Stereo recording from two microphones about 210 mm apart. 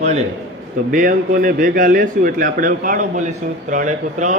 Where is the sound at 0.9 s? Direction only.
40° right (ahead or behind).